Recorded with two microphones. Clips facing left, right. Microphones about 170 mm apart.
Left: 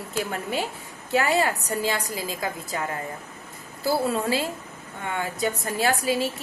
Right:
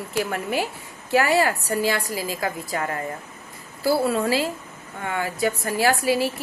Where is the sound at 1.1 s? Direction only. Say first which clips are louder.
Right 3 dB; 20° left (ahead or behind).